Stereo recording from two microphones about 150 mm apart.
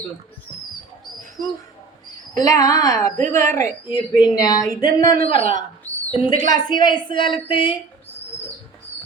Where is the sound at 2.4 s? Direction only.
25° left (ahead or behind).